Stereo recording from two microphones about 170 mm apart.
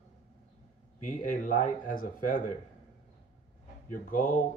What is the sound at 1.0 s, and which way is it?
Speech, 50° left (ahead or behind).